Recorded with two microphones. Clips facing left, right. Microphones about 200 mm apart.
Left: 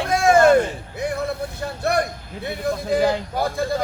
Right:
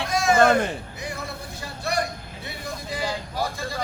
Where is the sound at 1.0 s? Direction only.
55° left (ahead or behind).